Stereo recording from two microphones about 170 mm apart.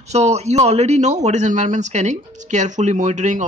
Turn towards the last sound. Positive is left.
turn(degrees=-45)  # may be behind; listen again after turning